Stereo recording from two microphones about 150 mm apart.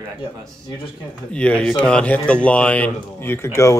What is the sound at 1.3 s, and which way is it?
Speech, 10° left (ahead or behind).